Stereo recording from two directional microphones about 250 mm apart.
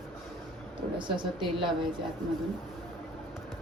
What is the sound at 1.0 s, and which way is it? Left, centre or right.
Speech, centre.